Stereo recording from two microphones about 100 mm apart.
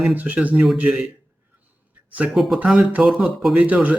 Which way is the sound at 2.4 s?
5° right (ahead or behind).